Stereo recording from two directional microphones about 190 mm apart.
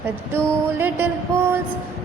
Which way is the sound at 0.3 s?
10° right (ahead or behind).